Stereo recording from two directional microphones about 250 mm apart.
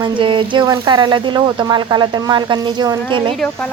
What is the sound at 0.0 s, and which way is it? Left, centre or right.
Speech, centre.